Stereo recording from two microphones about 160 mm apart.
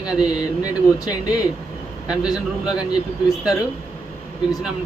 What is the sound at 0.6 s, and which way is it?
Speech, 20° left (ahead or behind).